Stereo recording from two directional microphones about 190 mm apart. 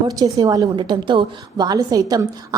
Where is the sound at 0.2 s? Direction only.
20° right (ahead or behind).